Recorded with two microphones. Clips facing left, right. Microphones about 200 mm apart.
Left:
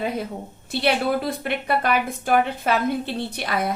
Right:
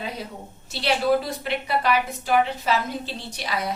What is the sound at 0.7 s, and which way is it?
A woman's voice, 55° left (ahead or behind).